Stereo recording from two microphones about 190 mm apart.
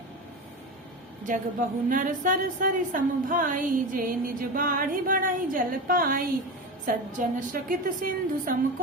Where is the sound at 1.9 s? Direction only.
45° right (ahead or behind).